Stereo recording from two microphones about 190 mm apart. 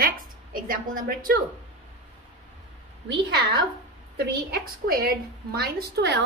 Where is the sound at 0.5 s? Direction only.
45° right (ahead or behind).